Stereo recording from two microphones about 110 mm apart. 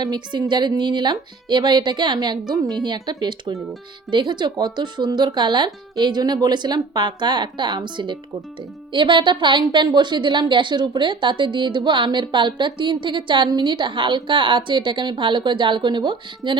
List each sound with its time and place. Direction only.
0.0 s a woman's voice: 40° right (ahead or behind)